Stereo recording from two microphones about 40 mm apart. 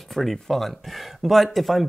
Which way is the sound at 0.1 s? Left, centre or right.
Centre.